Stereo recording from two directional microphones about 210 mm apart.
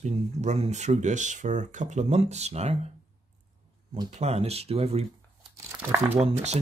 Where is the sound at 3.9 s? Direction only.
30° right (ahead or behind).